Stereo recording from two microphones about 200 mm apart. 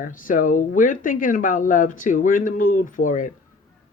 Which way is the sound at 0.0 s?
40° left (ahead or behind).